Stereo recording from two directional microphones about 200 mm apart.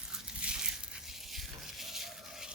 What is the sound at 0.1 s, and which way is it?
Goat, 5° right (ahead or behind).